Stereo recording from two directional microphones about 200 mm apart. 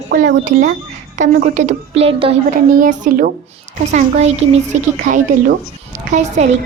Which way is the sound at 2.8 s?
40° right (ahead or behind).